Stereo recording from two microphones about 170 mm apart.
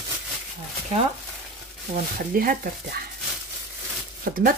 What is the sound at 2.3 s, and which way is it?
Speech, 60° right (ahead or behind).